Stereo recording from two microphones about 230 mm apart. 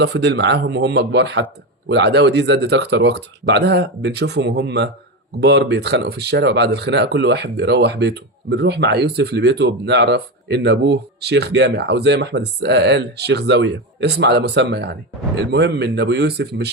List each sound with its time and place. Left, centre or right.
0.0 s speech: right